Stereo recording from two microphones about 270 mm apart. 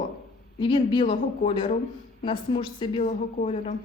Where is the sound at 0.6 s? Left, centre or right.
Centre.